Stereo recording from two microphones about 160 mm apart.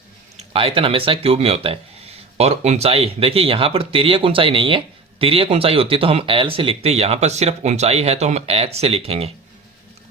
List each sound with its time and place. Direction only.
0.3 s speech: 35° right (ahead or behind)